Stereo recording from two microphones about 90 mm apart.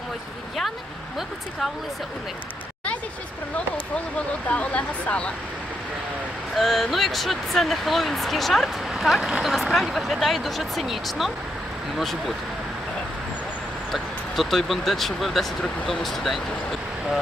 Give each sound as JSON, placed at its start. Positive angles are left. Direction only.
{"t": 4.4, "sound": "speech", "side_deg": 15}
{"t": 6.6, "sound": "speech", "side_deg": 0}
{"t": 13.9, "sound": "speech", "side_deg": 0}